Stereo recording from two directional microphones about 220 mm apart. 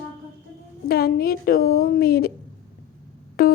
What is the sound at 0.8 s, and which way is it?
Speech, 45° left (ahead or behind).